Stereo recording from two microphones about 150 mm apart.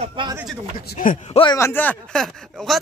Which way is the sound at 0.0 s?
35° right (ahead or behind).